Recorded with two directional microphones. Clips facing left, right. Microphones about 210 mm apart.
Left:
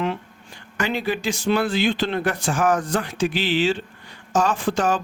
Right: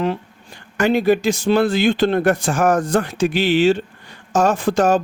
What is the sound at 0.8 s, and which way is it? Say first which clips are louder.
Speech: right 9 dB; 45° right (ahead or behind).